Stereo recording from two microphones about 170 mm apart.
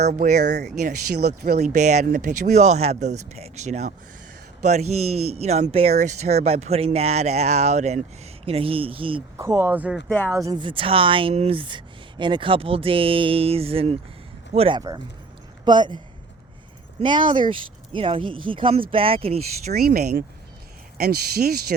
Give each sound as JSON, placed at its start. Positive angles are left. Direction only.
{"t": 0.1, "sound": "speech", "side_deg": -45}
{"t": 1.2, "sound": "speech", "side_deg": -70}
{"t": 1.5, "sound": "speech", "side_deg": -45}
{"t": 9.4, "sound": "speech", "side_deg": -15}
{"t": 10.3, "sound": "speech", "side_deg": -20}
{"t": 14.8, "sound": "speech", "side_deg": -25}
{"t": 17.0, "sound": "speech", "side_deg": -30}
{"t": 19.7, "sound": "speech", "side_deg": -65}